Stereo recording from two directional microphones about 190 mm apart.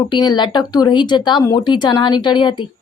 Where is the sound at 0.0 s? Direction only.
20° left (ahead or behind).